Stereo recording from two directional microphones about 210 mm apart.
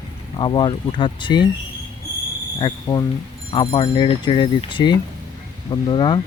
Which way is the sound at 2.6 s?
20° left (ahead or behind).